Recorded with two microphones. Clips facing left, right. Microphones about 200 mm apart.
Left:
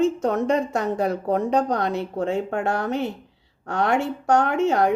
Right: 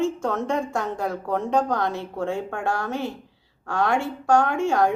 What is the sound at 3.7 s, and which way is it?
Speech, 20° left (ahead or behind).